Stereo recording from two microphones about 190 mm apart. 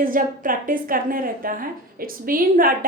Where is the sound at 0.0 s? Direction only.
45° right (ahead or behind).